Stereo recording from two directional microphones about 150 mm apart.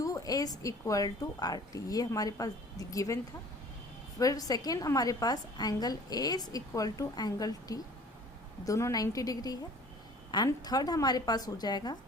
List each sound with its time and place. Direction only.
0.0 s a woman's voice: 25° left (ahead or behind)
4.2 s a woman's voice: 25° left (ahead or behind)